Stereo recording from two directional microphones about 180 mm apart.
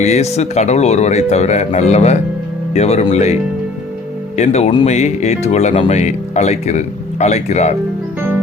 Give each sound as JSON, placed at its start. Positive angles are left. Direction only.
{"t": 0.0, "sound": "speech", "side_deg": 40}
{"t": 4.4, "sound": "speech", "side_deg": 35}